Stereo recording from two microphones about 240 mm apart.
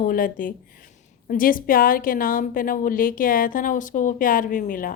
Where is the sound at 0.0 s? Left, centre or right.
Left.